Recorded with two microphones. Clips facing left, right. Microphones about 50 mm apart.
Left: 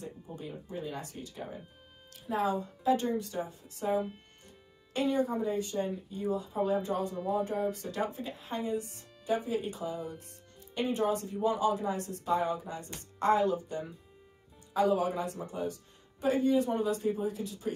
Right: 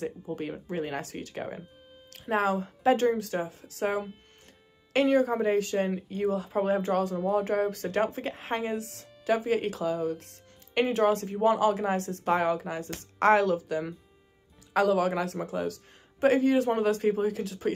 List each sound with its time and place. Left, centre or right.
0.0 s speech: right
4.9 s a woman's voice: right
11.6 s a woman's voice: right